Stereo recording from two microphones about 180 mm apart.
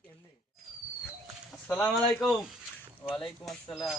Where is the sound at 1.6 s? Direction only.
10° left (ahead or behind).